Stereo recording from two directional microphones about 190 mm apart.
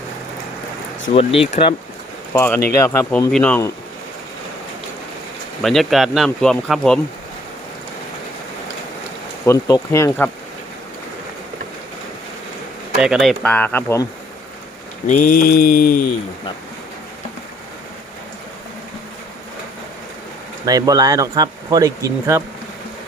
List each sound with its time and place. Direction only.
1.1 s speech: 30° left (ahead or behind)
2.3 s speech: 10° left (ahead or behind)
5.6 s speech: centre (ahead or behind)
9.5 s speech: 15° left (ahead or behind)
13.0 s speech: centre (ahead or behind); by 14.1 s 15° left (ahead or behind)
15.0 s mantra: 40° left (ahead or behind)
20.7 s speech: 20° right (ahead or behind)